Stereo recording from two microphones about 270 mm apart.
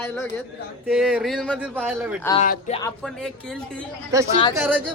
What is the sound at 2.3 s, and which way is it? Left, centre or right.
Speech, left.